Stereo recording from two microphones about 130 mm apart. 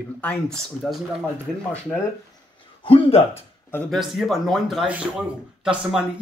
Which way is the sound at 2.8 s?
45° left (ahead or behind).